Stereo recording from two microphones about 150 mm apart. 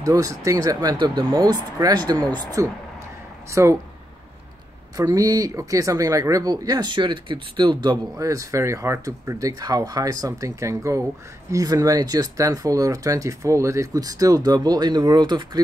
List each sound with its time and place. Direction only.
0.0 s speech: 20° right (ahead or behind)
4.9 s speech: 25° right (ahead or behind)